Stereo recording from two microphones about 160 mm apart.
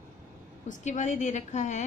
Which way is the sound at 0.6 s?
50° left (ahead or behind).